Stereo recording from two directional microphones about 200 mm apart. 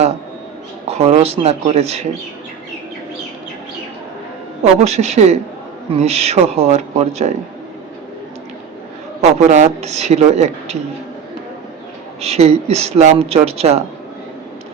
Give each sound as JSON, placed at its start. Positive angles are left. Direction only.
{"t": 0.9, "sound": "speech", "side_deg": -30}
{"t": 4.6, "sound": "speech", "side_deg": -35}
{"t": 9.4, "sound": "speech", "side_deg": -35}
{"t": 12.2, "sound": "speech", "side_deg": -30}